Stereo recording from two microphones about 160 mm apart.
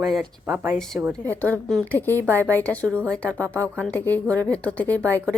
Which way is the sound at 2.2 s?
15° right (ahead or behind).